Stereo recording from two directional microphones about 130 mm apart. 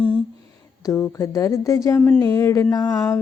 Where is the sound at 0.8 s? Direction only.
25° left (ahead or behind).